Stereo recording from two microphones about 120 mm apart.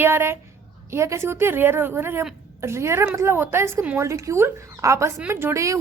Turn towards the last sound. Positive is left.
turn(degrees=-25)  # may be behind; listen again after turning